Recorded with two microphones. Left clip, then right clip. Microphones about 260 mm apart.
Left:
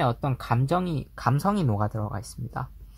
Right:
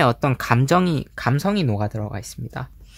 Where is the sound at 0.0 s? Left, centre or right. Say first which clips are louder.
Right 8 dB; right.